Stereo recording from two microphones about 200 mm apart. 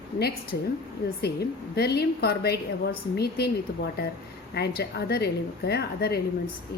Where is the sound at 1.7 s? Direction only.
55° left (ahead or behind).